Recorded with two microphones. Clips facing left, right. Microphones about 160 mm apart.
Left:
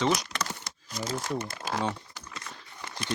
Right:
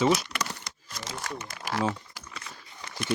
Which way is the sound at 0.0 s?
5° right (ahead or behind).